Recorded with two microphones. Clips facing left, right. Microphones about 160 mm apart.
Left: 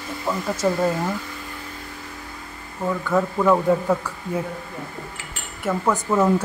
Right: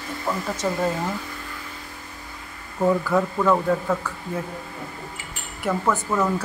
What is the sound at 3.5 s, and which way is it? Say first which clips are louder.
Speech: left 4 dB; 15° left (ahead or behind).